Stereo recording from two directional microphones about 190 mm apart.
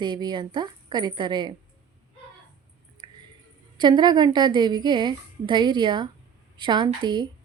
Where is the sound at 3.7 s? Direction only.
25° right (ahead or behind).